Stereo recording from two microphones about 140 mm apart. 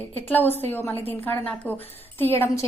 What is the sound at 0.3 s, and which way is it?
A woman's voice, 15° left (ahead or behind).